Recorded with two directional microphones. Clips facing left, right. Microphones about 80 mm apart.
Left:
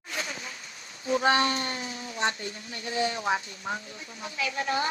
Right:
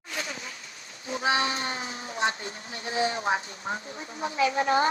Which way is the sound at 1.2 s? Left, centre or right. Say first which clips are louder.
Left 2 dB; centre.